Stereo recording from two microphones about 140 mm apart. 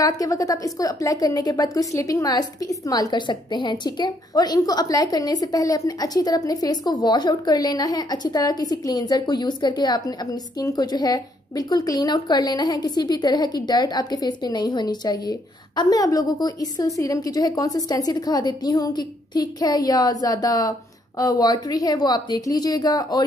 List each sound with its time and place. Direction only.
0.0 s a woman's voice: 25° left (ahead or behind)